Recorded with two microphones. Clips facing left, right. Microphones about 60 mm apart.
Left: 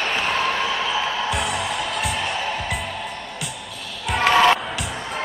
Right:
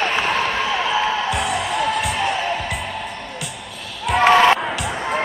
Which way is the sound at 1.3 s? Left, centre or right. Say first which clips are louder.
Right 3 dB; centre.